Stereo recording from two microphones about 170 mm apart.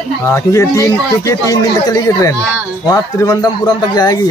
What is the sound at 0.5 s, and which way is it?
Speech, 20° left (ahead or behind).